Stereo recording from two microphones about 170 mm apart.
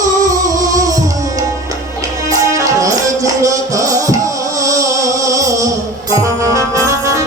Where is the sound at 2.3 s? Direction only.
20° right (ahead or behind).